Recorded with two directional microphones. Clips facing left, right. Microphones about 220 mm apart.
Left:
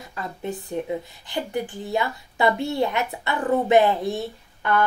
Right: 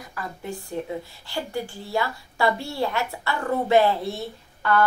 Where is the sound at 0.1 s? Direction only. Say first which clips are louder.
Left 3 dB; 20° left (ahead or behind).